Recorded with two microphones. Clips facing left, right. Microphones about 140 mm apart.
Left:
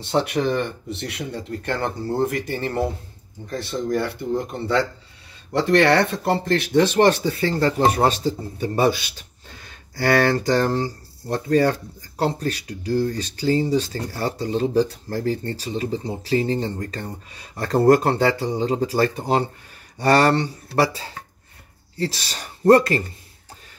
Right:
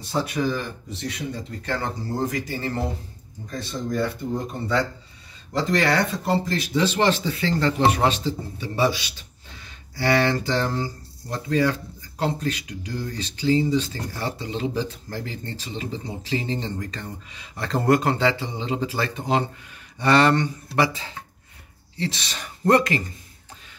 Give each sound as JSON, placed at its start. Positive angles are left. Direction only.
{"t": 0.0, "sound": "speech", "side_deg": 70}
{"t": 3.9, "sound": "speech", "side_deg": 65}
{"t": 5.7, "sound": "speech", "side_deg": 65}
{"t": 8.5, "sound": "speech", "side_deg": 50}